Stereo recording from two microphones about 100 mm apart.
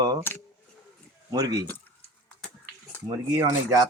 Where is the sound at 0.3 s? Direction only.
20° left (ahead or behind).